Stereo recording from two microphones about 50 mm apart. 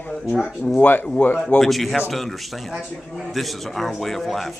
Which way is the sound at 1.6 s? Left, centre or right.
Centre.